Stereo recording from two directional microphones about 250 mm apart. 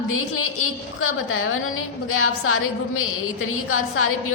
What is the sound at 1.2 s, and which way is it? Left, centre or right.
A woman's voice, left.